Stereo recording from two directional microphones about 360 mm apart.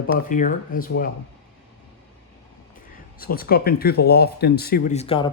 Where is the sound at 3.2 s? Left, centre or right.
Left.